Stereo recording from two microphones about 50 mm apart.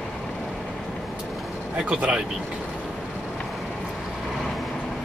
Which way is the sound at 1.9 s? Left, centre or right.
Centre.